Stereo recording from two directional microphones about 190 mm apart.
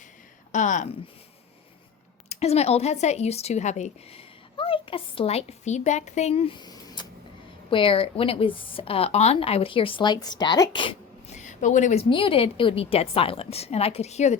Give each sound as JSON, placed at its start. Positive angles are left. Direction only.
{"t": 0.5, "sound": "a woman's voice", "side_deg": 40}
{"t": 2.3, "sound": "speech", "side_deg": 35}
{"t": 12.0, "sound": "a woman's voice", "side_deg": 25}